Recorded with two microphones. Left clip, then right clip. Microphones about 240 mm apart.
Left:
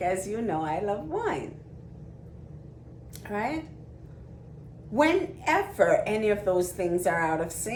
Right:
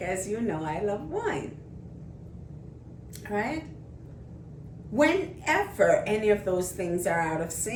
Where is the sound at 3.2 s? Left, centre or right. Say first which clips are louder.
Even; centre.